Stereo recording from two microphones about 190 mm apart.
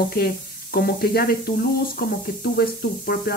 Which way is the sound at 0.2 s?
55° left (ahead or behind).